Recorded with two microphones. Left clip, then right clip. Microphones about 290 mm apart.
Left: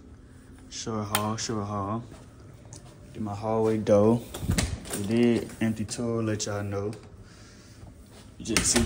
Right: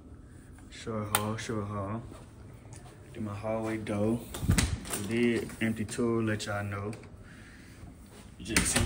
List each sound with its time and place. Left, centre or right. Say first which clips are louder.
0.7 s a sound: left 4 dB; centre
1.2 s mantra: left 4 dB; centre
3.3 s speech: left 8 dB; centre
4.3 s a sound: left 1 dB; centre
5.2 s speech: left 4 dB; centre
8.4 s speech: left 3 dB; centre